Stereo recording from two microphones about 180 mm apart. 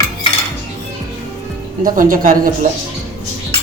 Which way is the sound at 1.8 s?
50° right (ahead or behind).